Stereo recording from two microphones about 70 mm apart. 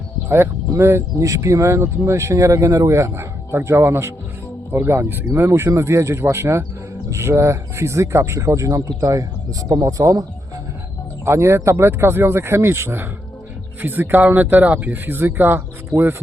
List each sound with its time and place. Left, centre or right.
0.3 s speech: right
11.3 s speech: right